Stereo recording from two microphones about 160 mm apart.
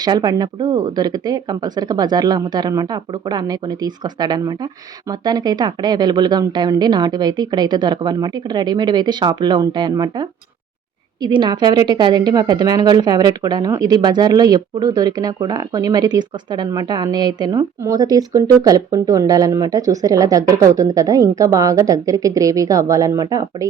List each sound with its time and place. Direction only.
0.0 s a woman's voice: 25° right (ahead or behind)